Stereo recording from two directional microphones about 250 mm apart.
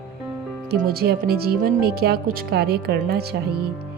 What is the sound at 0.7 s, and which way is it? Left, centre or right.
Speech, right.